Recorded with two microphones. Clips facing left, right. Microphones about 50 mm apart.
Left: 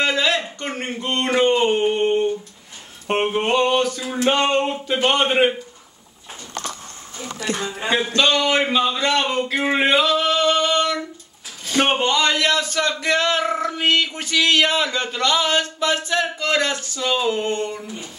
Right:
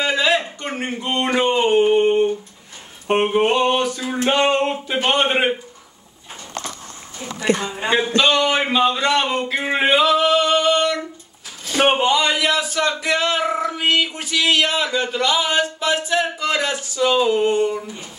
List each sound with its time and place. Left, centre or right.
0.0 s a sound: centre
4.6 s speech: centre
7.3 s speech: right
8.2 s speech: centre
9.4 s male singing: centre
11.6 s speech: centre